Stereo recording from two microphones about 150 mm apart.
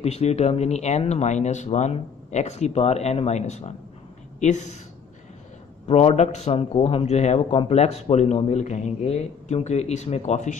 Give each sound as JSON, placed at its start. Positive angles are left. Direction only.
{"t": 0.0, "sound": "speech", "side_deg": 45}
{"t": 5.9, "sound": "speech", "side_deg": 45}